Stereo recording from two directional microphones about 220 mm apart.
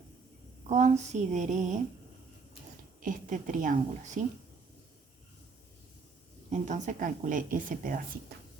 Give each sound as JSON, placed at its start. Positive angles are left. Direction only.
{"t": 0.7, "sound": "a woman's voice", "side_deg": -30}
{"t": 3.0, "sound": "a woman's voice", "side_deg": -35}
{"t": 6.5, "sound": "a woman's voice", "side_deg": -30}